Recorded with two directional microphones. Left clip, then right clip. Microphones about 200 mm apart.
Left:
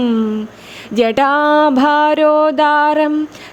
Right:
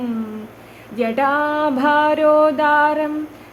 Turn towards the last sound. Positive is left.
turn(degrees=50)  # may be behind; listen again after turning